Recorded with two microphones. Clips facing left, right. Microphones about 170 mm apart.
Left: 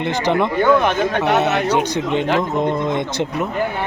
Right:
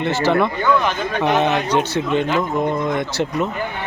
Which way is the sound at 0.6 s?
55° left (ahead or behind).